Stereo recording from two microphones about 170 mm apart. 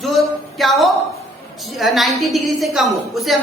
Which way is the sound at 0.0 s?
Centre (ahead or behind).